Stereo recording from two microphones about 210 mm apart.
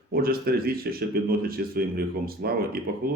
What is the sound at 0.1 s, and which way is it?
Speech, 45° right (ahead or behind).